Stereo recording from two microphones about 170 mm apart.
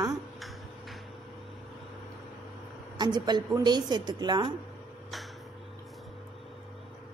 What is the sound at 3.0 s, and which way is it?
A woman's voice, 25° right (ahead or behind).